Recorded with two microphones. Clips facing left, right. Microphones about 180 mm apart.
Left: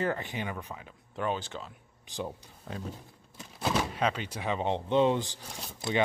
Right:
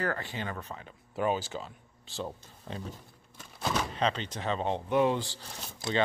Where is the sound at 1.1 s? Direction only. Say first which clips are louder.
Right 3 dB; 10° right (ahead or behind).